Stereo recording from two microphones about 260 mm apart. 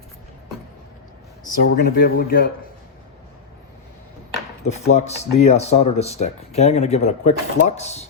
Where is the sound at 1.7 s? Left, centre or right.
Left.